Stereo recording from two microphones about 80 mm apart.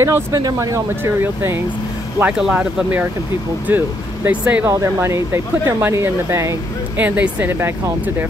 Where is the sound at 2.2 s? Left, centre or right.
Centre.